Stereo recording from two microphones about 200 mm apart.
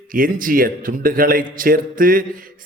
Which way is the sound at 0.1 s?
45° right (ahead or behind).